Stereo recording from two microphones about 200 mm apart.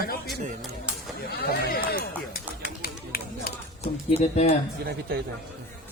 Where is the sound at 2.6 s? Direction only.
50° left (ahead or behind).